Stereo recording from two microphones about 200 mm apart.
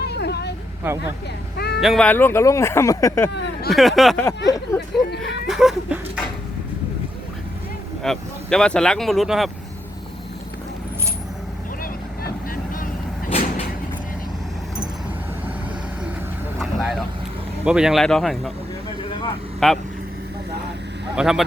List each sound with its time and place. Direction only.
0.0 s vehicle: 55° left (ahead or behind)
0.8 s speech: 10° right (ahead or behind)
1.5 s a sound: 55° left (ahead or behind)
1.8 s speech: centre (ahead or behind)
3.7 s speech: centre (ahead or behind)
4.4 s speech: 20° left (ahead or behind)
5.5 s a sound: centre (ahead or behind)
8.0 s speech: centre (ahead or behind)
13.3 s vehicle: 30° left (ahead or behind)
17.7 s speech: 5° right (ahead or behind)
19.5 s speech: centre (ahead or behind)
21.2 s speech: 5° right (ahead or behind)